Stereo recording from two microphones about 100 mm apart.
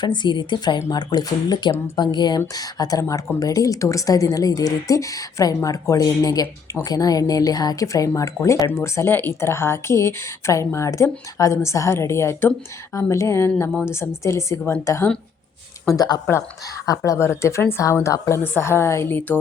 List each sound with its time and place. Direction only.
0.0 s a woman's voice: 50° left (ahead or behind); by 15.1 s 25° left (ahead or behind)
15.9 s a woman's voice: 40° left (ahead or behind); by 19.4 s 20° left (ahead or behind)